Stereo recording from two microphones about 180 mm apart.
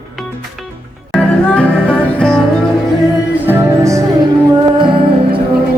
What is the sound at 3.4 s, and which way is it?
Music, 15° right (ahead or behind).